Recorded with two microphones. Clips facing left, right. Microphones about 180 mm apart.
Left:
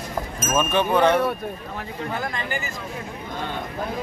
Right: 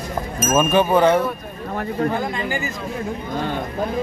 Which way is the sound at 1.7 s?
50° right (ahead or behind).